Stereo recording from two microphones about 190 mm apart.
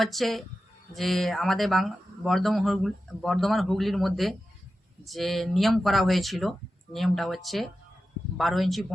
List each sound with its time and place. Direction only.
0.0 s speech: centre (ahead or behind)